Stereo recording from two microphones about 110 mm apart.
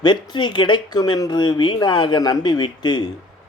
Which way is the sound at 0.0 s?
45° left (ahead or behind).